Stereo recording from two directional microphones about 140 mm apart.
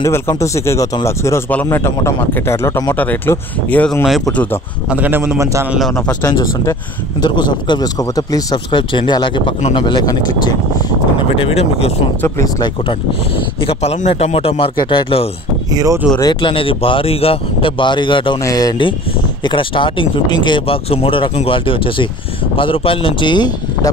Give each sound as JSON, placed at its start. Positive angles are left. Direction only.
{"t": 0.0, "sound": "speech", "side_deg": 20}
{"t": 4.8, "sound": "a man's voice", "side_deg": -10}
{"t": 5.7, "sound": "speech", "side_deg": 0}
{"t": 6.2, "sound": "speech", "side_deg": 25}
{"t": 11.3, "sound": "speech", "side_deg": 45}
{"t": 12.2, "sound": "speech", "side_deg": 20}
{"t": 13.7, "sound": "speech", "side_deg": 50}
{"t": 15.7, "sound": "speech", "side_deg": -25}
{"t": 16.2, "sound": "speech", "side_deg": 35}